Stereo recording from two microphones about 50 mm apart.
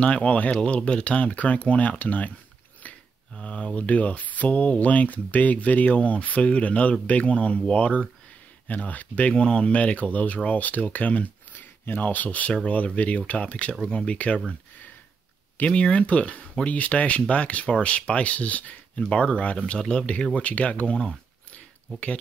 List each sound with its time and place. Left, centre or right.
0.0 s speech: left
3.3 s speech: left
15.6 s speech: left